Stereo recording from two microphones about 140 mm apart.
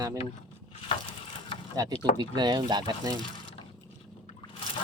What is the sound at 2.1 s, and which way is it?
Speech, 30° right (ahead or behind).